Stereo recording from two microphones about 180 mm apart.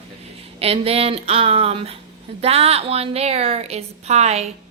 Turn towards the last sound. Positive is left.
turn(degrees=-35)  # may be behind; listen again after turning